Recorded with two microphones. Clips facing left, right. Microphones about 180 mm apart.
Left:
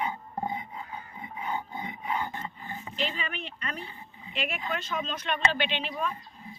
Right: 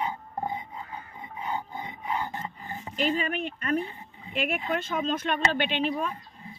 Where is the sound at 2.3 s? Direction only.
40° right (ahead or behind).